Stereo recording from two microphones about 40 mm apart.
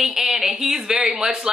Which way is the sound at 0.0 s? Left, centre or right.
Centre.